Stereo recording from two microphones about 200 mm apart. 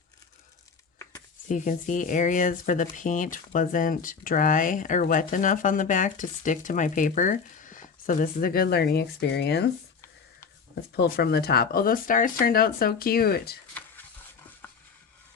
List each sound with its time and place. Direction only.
1.5 s speech: 40° left (ahead or behind); by 9.6 s 55° left (ahead or behind)
10.9 s speech: 55° left (ahead or behind)
14.6 s a sound: 10° left (ahead or behind)